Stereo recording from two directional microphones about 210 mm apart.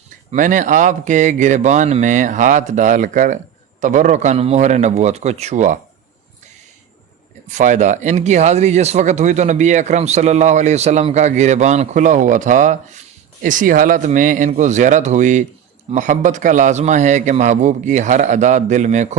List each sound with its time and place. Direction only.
0.3 s speech: 35° right (ahead or behind)
7.5 s speech: 35° right (ahead or behind)